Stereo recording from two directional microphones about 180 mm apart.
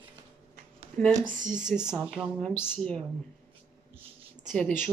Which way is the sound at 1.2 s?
45° right (ahead or behind).